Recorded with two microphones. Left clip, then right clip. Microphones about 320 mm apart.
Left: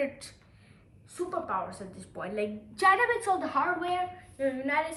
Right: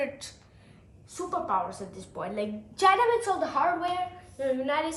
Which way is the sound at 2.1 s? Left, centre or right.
Centre.